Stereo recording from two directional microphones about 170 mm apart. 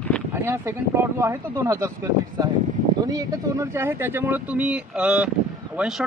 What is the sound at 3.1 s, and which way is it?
Speech, 20° right (ahead or behind).